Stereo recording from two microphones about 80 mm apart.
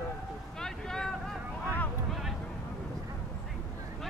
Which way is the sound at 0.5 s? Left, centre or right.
Centre.